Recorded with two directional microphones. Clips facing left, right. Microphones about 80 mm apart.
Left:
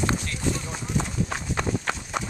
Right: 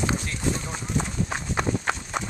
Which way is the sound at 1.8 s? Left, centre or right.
Centre.